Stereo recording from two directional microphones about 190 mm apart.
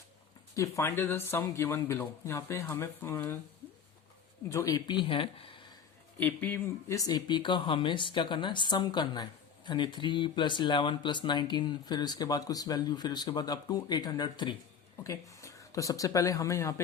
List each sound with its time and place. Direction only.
0.5 s speech: 15° left (ahead or behind)
4.4 s speech: 15° left (ahead or behind)
6.1 s speech: 10° left (ahead or behind)